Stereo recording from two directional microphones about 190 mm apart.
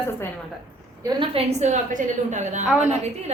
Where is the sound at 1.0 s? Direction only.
25° right (ahead or behind).